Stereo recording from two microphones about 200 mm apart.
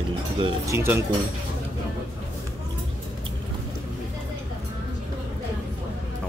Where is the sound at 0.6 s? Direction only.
15° right (ahead or behind).